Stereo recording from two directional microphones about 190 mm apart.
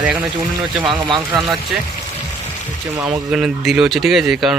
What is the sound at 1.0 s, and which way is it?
Speech, 25° right (ahead or behind).